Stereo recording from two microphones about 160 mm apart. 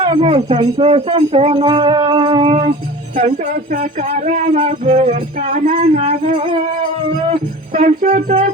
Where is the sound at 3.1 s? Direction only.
55° right (ahead or behind).